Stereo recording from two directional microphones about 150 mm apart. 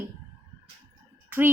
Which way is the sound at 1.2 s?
15° right (ahead or behind).